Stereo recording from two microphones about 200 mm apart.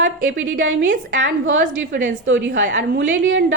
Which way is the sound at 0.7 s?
65° right (ahead or behind).